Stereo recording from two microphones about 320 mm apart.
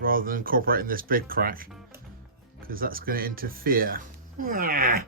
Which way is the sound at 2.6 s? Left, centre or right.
Right.